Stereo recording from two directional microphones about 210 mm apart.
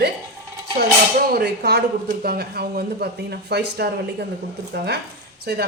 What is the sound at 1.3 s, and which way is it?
A woman's voice, 50° right (ahead or behind).